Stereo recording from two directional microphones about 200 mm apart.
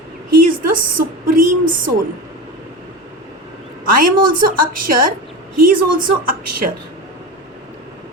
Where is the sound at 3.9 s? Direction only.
45° right (ahead or behind).